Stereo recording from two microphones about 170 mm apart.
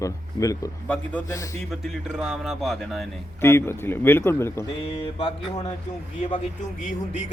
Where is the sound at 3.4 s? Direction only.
15° left (ahead or behind).